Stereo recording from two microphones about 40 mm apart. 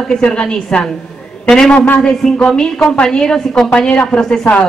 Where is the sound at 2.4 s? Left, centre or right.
Centre.